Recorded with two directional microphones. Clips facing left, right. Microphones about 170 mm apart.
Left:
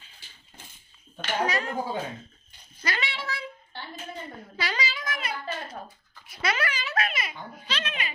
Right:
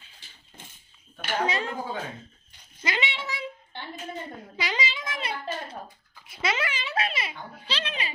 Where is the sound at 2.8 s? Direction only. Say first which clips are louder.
Right 2 dB; 20° right (ahead or behind).